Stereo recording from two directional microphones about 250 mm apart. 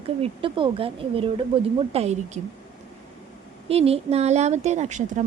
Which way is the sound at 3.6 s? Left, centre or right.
Right.